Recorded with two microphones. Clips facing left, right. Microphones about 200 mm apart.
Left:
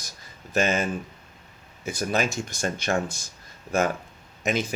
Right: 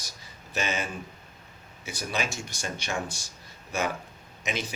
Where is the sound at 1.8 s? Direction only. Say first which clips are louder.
Left 6 dB; 50° left (ahead or behind).